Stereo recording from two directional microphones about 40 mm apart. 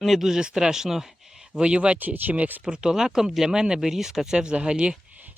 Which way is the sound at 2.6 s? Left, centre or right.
Right.